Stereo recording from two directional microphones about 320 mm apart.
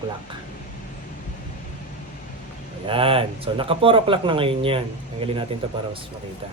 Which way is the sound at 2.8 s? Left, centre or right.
Centre.